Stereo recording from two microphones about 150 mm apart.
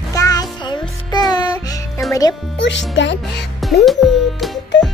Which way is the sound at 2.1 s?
25° left (ahead or behind).